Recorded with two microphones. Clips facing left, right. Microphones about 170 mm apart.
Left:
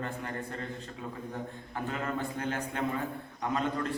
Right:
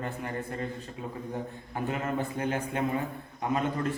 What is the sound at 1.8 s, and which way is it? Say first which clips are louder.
A man's voice: right 3 dB; 15° right (ahead or behind).